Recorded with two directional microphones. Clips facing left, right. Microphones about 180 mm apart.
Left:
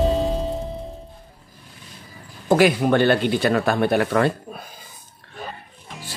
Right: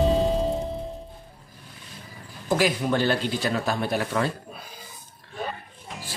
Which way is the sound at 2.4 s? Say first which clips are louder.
Left 7 dB; 65° left (ahead or behind).